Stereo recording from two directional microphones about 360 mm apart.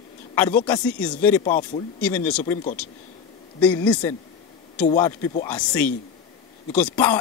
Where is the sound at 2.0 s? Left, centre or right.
Centre.